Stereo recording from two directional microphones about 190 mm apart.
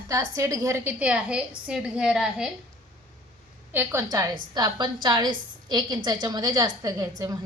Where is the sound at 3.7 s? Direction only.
15° right (ahead or behind).